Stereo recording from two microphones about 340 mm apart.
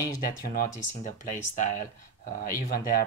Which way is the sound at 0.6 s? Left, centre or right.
Left.